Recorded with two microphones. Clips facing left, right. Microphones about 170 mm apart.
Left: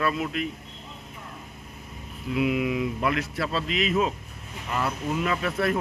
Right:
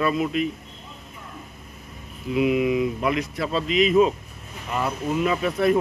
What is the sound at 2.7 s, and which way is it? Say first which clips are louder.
Speech: right 4 dB; 15° right (ahead or behind).